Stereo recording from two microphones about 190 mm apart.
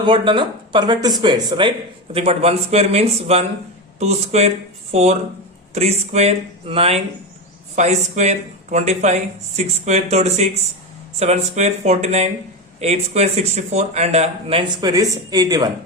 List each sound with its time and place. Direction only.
0.0 s speech: 25° right (ahead or behind)